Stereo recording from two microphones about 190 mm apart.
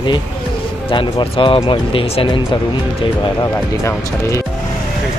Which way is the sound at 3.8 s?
15° left (ahead or behind).